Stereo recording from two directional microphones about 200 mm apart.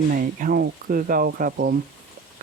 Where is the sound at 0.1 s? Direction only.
45° right (ahead or behind).